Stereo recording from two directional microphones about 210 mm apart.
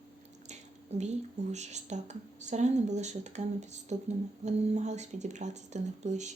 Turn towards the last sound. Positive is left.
turn(degrees=-35)  # may be behind; listen again after turning